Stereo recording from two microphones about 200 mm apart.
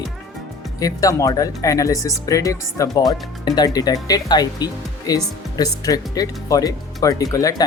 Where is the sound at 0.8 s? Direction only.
15° left (ahead or behind).